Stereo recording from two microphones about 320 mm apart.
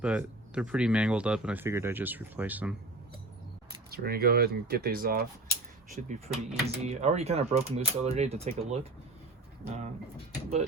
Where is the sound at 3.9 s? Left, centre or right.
Right.